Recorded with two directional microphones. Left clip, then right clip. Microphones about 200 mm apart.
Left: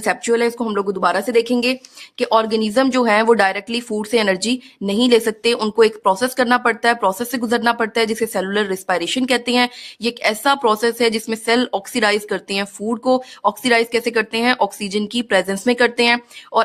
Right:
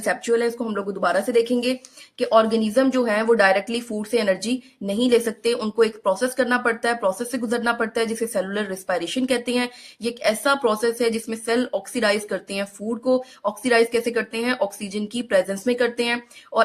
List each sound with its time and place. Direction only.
0.0 s a woman's voice: 40° left (ahead or behind)